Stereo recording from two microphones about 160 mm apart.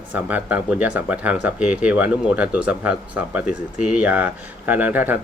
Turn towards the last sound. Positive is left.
turn(degrees=-10)  # may be behind; listen again after turning